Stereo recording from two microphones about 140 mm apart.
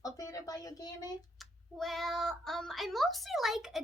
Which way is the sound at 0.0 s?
25° left (ahead or behind).